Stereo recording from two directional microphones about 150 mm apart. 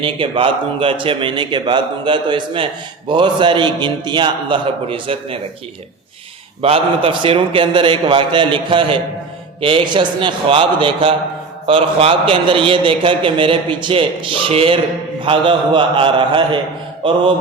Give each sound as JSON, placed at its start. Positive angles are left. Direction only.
{"t": 0.0, "sound": "a man's voice", "side_deg": -35}
{"t": 6.6, "sound": "a man's voice", "side_deg": -40}